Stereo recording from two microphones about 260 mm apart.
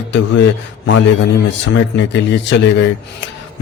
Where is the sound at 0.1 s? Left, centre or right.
Left.